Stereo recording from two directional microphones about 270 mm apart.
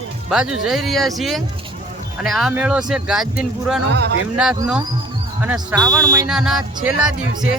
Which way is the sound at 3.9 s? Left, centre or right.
Right.